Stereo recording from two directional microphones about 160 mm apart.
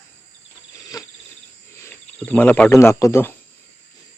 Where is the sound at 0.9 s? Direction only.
20° left (ahead or behind).